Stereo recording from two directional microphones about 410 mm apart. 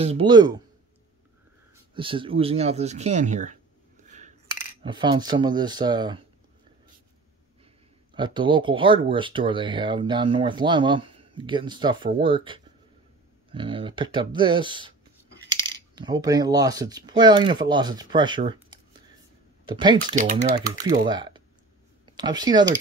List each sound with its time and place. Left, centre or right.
0.0 s speech: centre
2.0 s speech: centre
4.8 s speech: centre
8.1 s speech: centre